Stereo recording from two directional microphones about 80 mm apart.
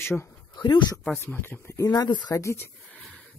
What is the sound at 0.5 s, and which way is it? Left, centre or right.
Speech, left.